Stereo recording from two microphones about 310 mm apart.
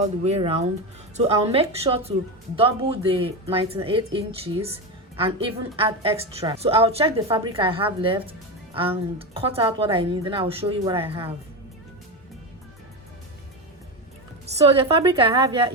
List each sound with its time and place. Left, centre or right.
0.0 s a woman's voice: centre
14.4 s a woman's voice: centre